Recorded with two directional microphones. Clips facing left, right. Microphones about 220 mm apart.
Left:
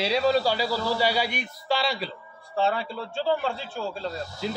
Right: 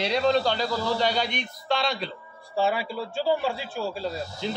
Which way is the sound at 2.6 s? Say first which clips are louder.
Right 1 dB; 10° right (ahead or behind).